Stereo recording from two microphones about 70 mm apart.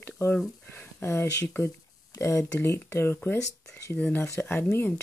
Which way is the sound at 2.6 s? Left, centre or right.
Left.